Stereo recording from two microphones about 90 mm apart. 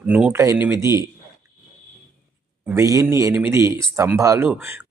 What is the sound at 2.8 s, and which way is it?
Speech, 35° right (ahead or behind).